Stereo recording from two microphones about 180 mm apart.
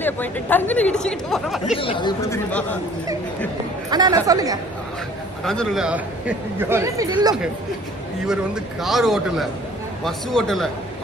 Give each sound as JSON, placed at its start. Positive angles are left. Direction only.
{"t": 0.0, "sound": "speech", "side_deg": 10}
{"t": 1.8, "sound": "speech", "side_deg": 25}
{"t": 3.9, "sound": "speech", "side_deg": -20}
{"t": 5.4, "sound": "a man's voice", "side_deg": 0}
{"t": 8.8, "sound": "a man's voice", "side_deg": 0}